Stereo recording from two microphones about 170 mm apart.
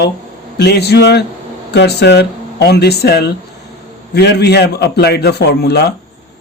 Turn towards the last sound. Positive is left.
turn(degrees=75)  # may be behind; listen again after turning